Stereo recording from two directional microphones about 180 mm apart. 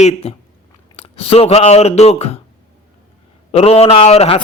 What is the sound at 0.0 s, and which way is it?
A man's voice, 35° left (ahead or behind).